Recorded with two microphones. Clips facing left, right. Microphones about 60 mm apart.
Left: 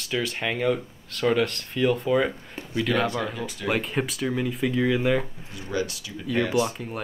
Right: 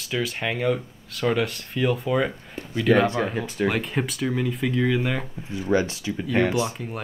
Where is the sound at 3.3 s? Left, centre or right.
Right.